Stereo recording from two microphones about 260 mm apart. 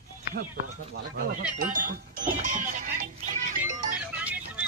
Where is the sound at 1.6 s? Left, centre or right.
Right.